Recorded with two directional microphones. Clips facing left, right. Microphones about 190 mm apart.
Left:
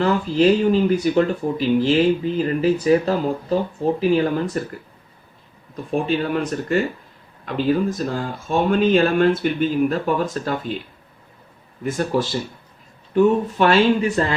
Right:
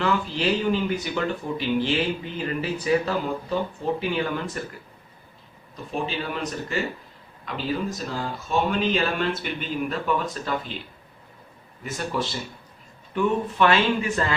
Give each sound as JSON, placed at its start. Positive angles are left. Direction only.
{"t": 0.0, "sound": "speech", "side_deg": 40}
{"t": 5.9, "sound": "speech", "side_deg": 50}
{"t": 11.8, "sound": "speech", "side_deg": 50}